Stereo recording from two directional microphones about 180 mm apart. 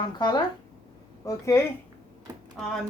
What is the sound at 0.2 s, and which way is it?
Speech, 25° left (ahead or behind).